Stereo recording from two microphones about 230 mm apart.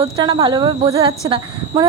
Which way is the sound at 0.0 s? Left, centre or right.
Centre.